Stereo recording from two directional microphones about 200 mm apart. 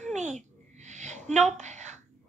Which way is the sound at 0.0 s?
35° right (ahead or behind).